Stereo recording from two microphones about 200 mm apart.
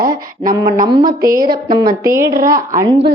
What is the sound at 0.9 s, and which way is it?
A woman's voice, 20° right (ahead or behind).